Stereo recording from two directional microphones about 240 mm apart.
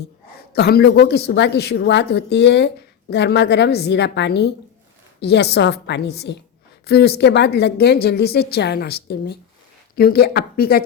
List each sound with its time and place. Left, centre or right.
0.5 s speech: left